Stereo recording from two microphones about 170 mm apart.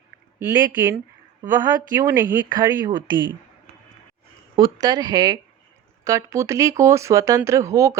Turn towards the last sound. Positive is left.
turn(degrees=-15)  # may be behind; listen again after turning